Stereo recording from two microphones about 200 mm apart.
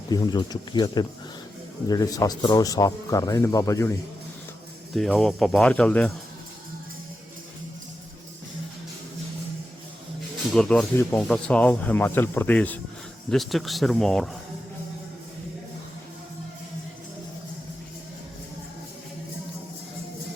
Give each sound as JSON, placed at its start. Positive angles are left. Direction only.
{"t": 0.1, "sound": "speech", "side_deg": 20}
{"t": 4.9, "sound": "speech", "side_deg": 0}
{"t": 10.5, "sound": "speech", "side_deg": 5}